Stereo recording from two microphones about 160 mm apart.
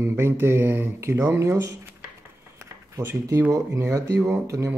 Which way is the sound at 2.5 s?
15° right (ahead or behind).